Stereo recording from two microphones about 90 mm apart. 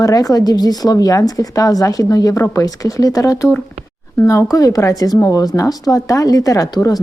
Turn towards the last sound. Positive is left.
turn(degrees=40)  # may be behind; listen again after turning